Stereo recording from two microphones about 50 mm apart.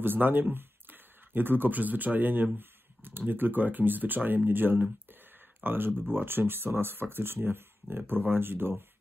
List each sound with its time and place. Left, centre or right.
0.0 s speech: right